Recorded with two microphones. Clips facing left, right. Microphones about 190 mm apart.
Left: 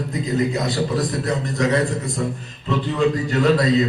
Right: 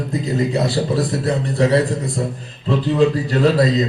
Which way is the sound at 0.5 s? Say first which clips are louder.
Right 3 dB; 30° right (ahead or behind).